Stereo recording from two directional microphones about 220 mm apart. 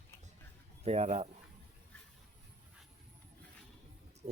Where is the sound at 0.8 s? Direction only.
30° right (ahead or behind).